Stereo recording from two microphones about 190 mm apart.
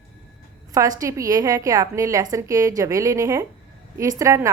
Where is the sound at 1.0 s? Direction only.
15° right (ahead or behind).